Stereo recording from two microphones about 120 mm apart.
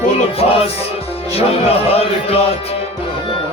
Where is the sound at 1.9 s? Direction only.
55° left (ahead or behind).